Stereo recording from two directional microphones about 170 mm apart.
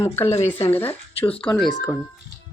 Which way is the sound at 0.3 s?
35° left (ahead or behind).